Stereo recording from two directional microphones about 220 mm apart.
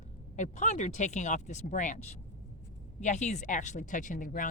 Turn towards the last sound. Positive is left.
turn(degrees=35)  # may be behind; listen again after turning